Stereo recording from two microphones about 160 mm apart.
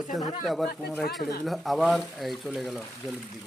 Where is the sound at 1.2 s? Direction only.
70° left (ahead or behind).